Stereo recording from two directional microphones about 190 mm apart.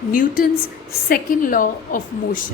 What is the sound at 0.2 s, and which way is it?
A woman's voice, 45° left (ahead or behind).